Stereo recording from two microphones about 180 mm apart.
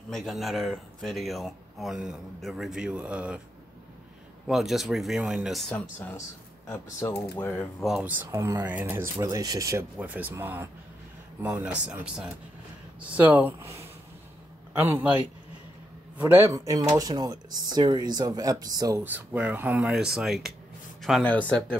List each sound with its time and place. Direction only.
0.1 s speech: centre (ahead or behind)
4.5 s speech: centre (ahead or behind)
6.7 s speech: 15° left (ahead or behind)
7.8 s speech: 5° right (ahead or behind)